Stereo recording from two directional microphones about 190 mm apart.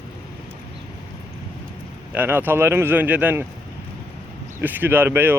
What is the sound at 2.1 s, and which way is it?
Speech, 10° right (ahead or behind).